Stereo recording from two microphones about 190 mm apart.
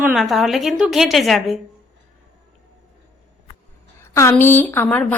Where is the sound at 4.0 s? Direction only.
15° left (ahead or behind).